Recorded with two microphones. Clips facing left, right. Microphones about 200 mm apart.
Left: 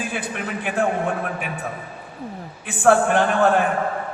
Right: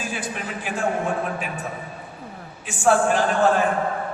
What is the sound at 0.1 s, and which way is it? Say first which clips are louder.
Speech: left 2 dB; 60° left (ahead or behind).